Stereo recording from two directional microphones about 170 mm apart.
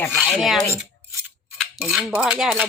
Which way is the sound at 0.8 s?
5° right (ahead or behind).